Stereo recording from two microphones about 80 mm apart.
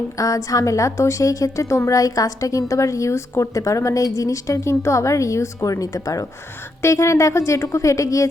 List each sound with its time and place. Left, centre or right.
0.2 s a woman's voice: left